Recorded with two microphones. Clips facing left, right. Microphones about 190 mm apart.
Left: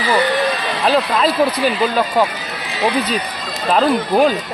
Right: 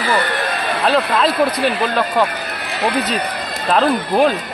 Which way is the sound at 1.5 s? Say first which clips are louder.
Left 1 dB; 60° right (ahead or behind).